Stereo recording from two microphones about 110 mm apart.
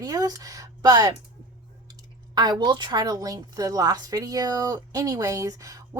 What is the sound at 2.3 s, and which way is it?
A woman's voice, 40° right (ahead or behind).